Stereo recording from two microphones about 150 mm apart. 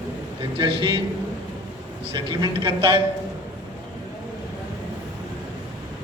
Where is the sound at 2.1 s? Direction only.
30° right (ahead or behind).